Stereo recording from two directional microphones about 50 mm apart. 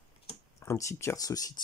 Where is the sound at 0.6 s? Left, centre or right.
Left.